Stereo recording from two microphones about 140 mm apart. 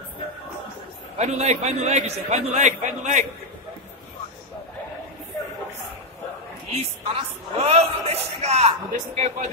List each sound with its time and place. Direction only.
1.1 s speech: 55° right (ahead or behind)
6.7 s speech: 50° right (ahead or behind)